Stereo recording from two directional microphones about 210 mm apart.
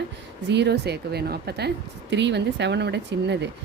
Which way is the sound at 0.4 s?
55° right (ahead or behind).